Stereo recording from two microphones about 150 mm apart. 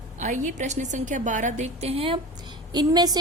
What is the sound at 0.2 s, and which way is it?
A woman's voice, 55° right (ahead or behind).